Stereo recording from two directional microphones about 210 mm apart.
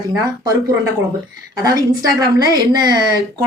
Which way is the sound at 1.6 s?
15° right (ahead or behind).